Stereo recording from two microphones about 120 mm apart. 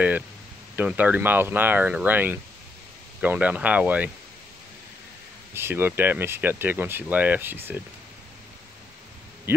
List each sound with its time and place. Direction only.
0.7 s speech: 15° right (ahead or behind)
5.5 s speech: 20° right (ahead or behind)
9.5 s speech: 15° right (ahead or behind)